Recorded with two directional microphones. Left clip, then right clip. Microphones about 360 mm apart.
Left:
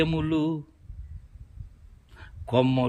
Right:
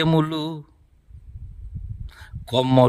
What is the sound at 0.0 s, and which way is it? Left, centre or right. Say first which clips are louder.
Speech: right 4 dB; centre.